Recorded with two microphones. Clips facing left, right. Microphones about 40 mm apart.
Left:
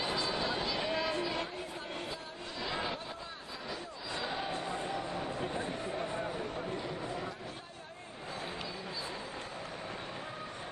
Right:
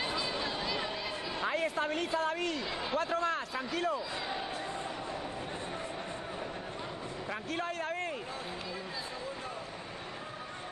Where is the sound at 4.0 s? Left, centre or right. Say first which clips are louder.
Right 2 dB; right.